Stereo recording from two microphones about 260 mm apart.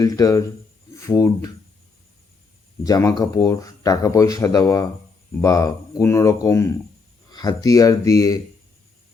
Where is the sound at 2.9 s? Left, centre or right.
Centre.